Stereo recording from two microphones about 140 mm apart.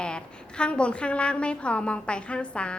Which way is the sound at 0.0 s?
5° left (ahead or behind).